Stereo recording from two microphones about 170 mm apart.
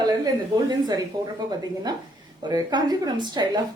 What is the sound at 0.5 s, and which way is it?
Speech, 25° right (ahead or behind).